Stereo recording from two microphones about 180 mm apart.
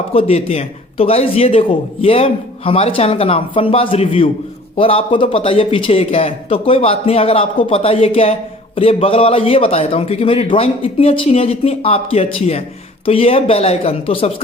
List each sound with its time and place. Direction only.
0.1 s speech: 35° left (ahead or behind)